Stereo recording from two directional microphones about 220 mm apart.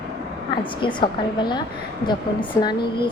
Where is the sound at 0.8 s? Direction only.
20° left (ahead or behind).